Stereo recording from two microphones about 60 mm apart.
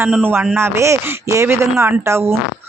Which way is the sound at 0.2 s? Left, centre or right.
Right.